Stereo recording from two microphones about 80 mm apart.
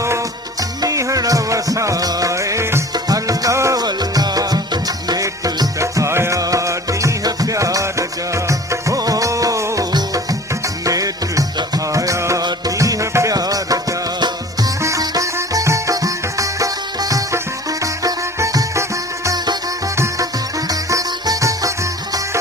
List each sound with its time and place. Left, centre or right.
0.8 s music: right
2.9 s music: right
3.8 s music: right
10.8 s music: right
12.4 s music: right
14.8 s music: right
20.7 s music: right